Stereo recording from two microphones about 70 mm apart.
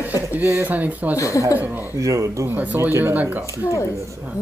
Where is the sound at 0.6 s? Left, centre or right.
Right.